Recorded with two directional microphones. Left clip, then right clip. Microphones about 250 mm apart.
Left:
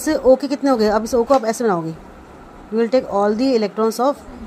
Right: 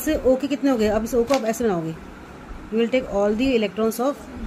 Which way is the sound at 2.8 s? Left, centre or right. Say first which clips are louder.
Left 4 dB; left.